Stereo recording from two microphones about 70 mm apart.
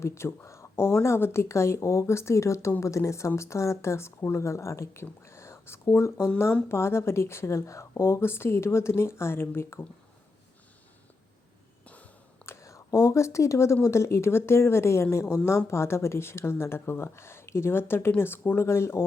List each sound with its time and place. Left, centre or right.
0.0 s speech: left
12.5 s speech: left